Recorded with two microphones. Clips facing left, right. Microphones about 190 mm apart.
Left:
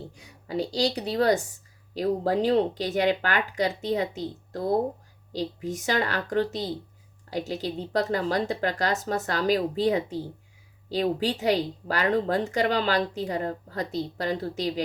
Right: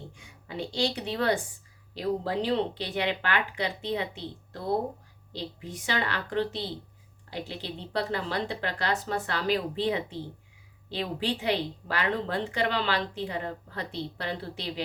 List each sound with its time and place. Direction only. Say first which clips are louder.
0.1 s a woman's voice: left 8 dB; 40° left (ahead or behind)